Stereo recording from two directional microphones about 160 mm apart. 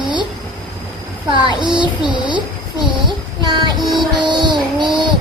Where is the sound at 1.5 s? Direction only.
30° right (ahead or behind).